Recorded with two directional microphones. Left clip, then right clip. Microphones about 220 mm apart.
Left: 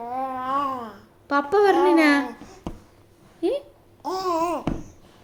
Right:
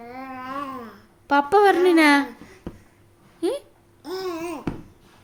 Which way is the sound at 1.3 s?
45° right (ahead or behind).